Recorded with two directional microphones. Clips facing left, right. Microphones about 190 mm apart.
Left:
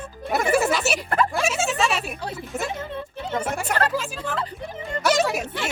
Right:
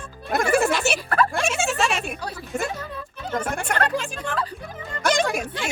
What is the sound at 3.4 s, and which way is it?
Speech, 5° left (ahead or behind).